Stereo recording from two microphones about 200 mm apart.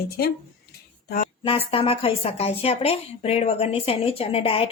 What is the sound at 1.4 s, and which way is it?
Speech, 30° left (ahead or behind).